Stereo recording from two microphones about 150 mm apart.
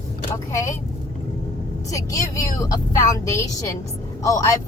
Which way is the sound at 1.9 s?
20° left (ahead or behind).